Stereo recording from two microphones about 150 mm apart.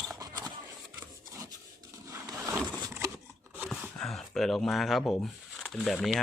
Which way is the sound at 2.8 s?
20° right (ahead or behind).